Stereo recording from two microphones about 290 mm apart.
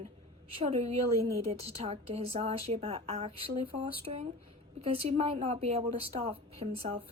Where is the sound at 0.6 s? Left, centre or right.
Centre.